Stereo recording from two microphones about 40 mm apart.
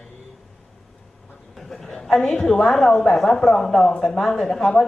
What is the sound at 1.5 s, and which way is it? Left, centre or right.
Speech, centre.